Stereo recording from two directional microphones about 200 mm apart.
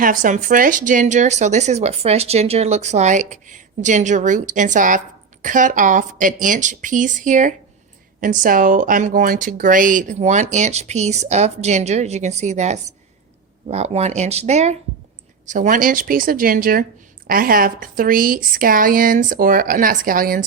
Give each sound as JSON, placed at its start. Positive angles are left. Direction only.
{"t": 0.0, "sound": "a woman's voice", "side_deg": -40}